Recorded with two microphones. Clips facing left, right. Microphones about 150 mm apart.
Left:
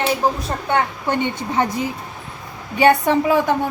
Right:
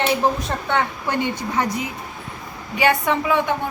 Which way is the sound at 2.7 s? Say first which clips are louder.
Left 5 dB; 35° left (ahead or behind).